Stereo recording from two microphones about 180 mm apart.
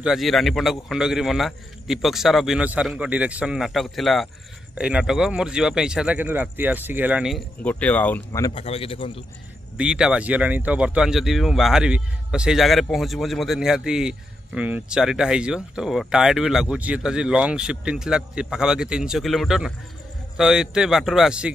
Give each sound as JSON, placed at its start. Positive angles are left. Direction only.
{"t": 0.0, "sound": "speech", "side_deg": 0}
{"t": 8.3, "sound": "speech", "side_deg": 20}
{"t": 8.6, "sound": "a man's voice", "side_deg": 30}
{"t": 9.8, "sound": "speech", "side_deg": -5}